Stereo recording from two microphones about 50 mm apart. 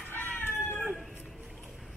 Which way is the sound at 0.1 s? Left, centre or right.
Left.